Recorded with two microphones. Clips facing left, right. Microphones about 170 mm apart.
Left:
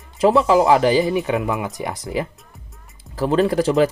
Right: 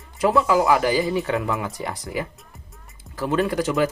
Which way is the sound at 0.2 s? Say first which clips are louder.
Left 4 dB; 25° left (ahead or behind).